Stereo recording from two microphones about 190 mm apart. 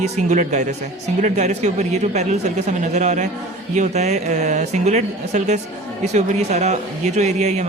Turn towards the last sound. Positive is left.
turn(degrees=-35)  # may be behind; listen again after turning